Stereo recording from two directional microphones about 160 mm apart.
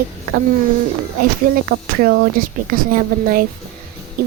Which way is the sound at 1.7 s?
70° right (ahead or behind).